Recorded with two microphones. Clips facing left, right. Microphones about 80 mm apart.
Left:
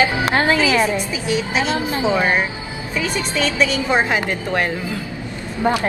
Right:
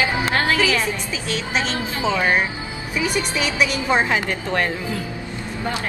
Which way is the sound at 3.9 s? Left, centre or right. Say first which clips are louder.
Left 1 dB; centre.